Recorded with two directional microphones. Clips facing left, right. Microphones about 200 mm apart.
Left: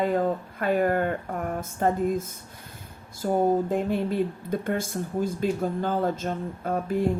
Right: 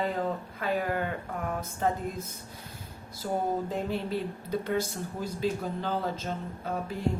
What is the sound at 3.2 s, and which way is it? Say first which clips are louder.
Speech: left 6 dB; 50° left (ahead or behind).